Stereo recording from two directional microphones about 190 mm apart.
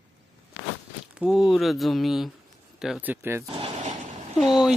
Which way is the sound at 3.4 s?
35° right (ahead or behind).